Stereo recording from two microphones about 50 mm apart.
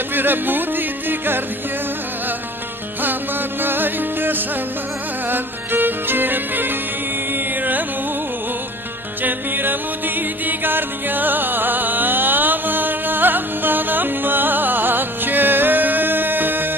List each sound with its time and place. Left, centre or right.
0.1 s music: right
3.6 s music: right
9.2 s music: right